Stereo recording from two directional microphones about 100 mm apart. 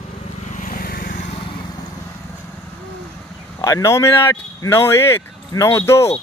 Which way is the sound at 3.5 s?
35° left (ahead or behind).